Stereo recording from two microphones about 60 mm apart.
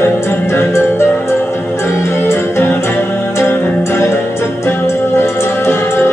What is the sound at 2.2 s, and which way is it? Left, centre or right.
Music, left.